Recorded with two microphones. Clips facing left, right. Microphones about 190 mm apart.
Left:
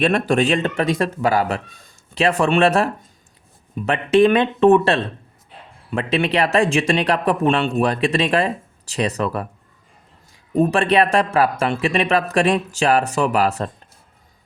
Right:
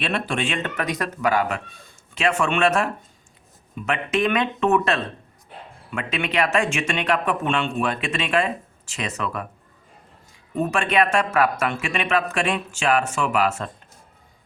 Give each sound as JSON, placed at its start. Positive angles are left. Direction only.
{"t": 0.0, "sound": "speech", "side_deg": 45}
{"t": 10.5, "sound": "speech", "side_deg": 35}